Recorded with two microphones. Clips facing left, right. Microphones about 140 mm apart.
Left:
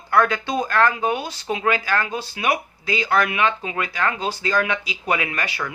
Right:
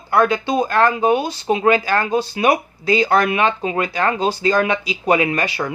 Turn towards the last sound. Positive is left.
turn(degrees=-30)  # may be behind; listen again after turning